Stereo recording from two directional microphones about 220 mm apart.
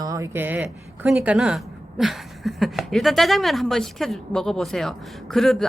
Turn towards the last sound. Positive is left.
turn(degrees=0)  # may be behind; listen again after turning